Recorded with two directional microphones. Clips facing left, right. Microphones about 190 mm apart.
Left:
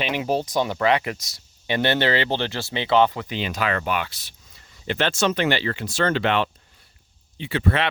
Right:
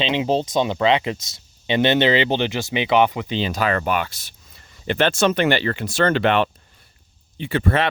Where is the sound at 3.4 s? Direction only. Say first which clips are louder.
Right 3 dB; 40° right (ahead or behind).